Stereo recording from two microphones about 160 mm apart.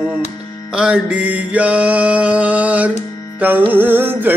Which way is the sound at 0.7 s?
5° right (ahead or behind).